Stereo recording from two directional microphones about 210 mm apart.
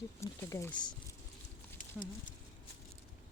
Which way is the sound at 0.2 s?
15° left (ahead or behind).